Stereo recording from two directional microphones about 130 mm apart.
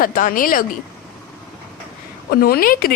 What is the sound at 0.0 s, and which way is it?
Speech, 90° left.